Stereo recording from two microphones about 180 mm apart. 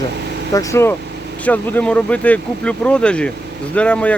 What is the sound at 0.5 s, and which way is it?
Speech, 15° left (ahead or behind).